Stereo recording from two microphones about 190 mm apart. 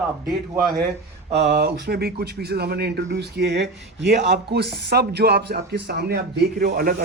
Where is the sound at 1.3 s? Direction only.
60° right (ahead or behind).